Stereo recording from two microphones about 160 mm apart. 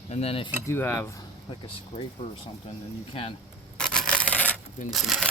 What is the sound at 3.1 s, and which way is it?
Speech, 35° left (ahead or behind).